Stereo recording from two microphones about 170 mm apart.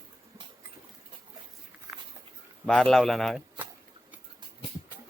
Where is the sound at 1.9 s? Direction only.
20° right (ahead or behind).